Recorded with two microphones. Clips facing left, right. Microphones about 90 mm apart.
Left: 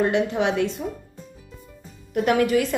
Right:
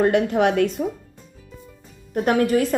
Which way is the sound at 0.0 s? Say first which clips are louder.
Right 3 dB; 50° right (ahead or behind).